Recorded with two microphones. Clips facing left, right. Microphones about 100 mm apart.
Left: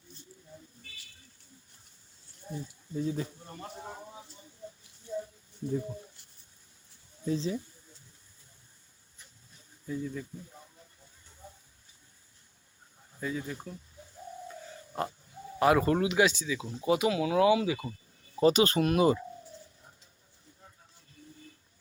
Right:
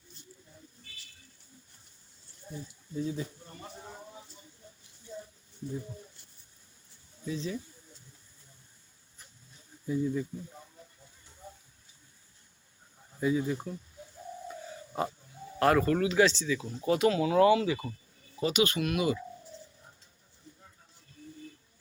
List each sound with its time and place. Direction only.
2.9 s speech: 40° left (ahead or behind)
7.3 s speech: 35° left (ahead or behind)
9.8 s speech: 15° right (ahead or behind)
13.1 s speech: 10° right (ahead or behind)
14.9 s pig: centre (ahead or behind)
15.5 s speech: 5° left (ahead or behind)
15.8 s speech: 20° left (ahead or behind)
18.3 s speech: 35° left (ahead or behind)